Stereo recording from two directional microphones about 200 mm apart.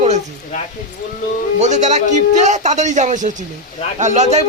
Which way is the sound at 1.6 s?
35° right (ahead or behind).